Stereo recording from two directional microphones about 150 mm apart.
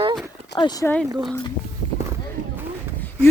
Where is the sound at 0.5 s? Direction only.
30° left (ahead or behind).